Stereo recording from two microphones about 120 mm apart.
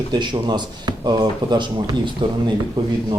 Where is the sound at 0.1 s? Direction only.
35° right (ahead or behind).